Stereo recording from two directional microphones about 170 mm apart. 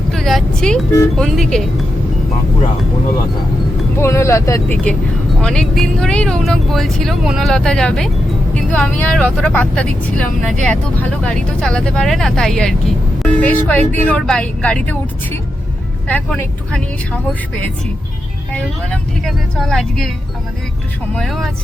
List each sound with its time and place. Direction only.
0.1 s speech: centre (ahead or behind)
3.9 s speech: 15° left (ahead or behind)
5.4 s speech: 5° left (ahead or behind)
18.5 s speech: 5° left (ahead or behind)
21.2 s speech: centre (ahead or behind)